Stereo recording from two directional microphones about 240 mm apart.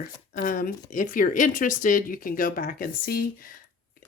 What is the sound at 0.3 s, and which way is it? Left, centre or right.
Speech, left.